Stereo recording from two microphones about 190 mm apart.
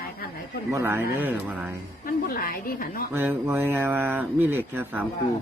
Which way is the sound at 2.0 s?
50° left (ahead or behind).